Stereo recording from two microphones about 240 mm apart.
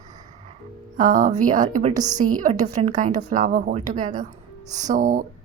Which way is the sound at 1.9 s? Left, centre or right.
Centre.